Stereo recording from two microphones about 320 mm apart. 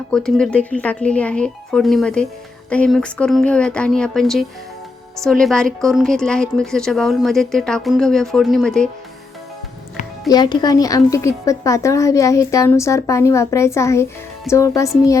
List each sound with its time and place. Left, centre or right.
0.1 s speech: centre
10.2 s a woman's voice: centre